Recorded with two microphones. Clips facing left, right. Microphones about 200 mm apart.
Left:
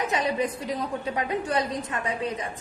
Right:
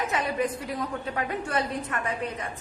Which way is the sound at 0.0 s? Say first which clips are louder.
Left 1 dB; 15° left (ahead or behind).